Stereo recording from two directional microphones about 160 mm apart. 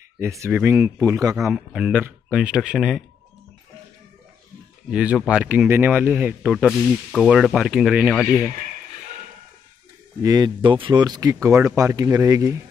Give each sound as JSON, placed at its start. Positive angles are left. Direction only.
{"t": 0.2, "sound": "speech", "side_deg": -15}
{"t": 1.5, "sound": "speech", "side_deg": -5}
{"t": 4.9, "sound": "speech", "side_deg": -5}
{"t": 10.2, "sound": "speech", "side_deg": -25}